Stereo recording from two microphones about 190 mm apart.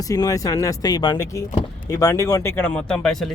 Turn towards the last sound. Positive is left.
turn(degrees=0)  # may be behind; listen again after turning